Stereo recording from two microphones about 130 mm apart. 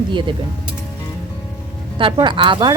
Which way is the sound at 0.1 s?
40° right (ahead or behind).